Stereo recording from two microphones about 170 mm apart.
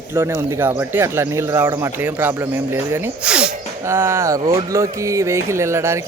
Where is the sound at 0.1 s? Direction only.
15° right (ahead or behind).